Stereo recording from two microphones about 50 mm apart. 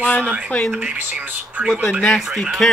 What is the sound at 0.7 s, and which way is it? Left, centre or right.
Speech, right.